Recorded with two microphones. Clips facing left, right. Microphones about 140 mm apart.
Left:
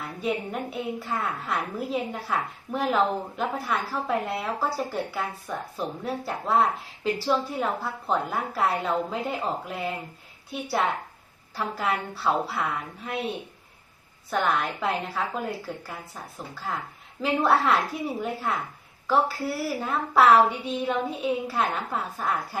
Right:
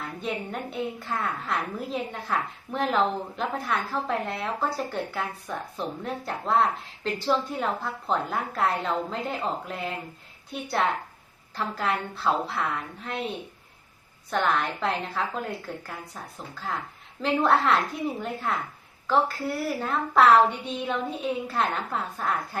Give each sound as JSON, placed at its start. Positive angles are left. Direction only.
{"t": 0.2, "sound": "a woman's voice", "side_deg": 5}